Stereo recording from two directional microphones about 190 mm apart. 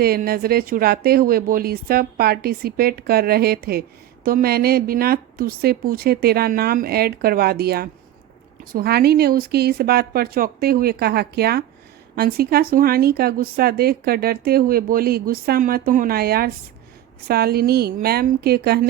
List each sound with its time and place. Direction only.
0.0 s speech: 55° right (ahead or behind)